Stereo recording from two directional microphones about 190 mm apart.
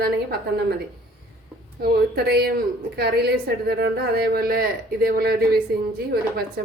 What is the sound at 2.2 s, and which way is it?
A woman's voice, 55° right (ahead or behind).